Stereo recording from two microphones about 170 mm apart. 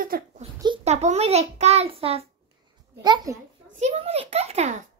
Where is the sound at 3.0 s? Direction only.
25° right (ahead or behind).